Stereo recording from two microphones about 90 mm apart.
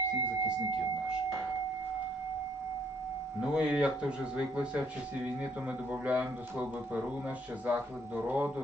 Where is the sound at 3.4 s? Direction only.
10° right (ahead or behind).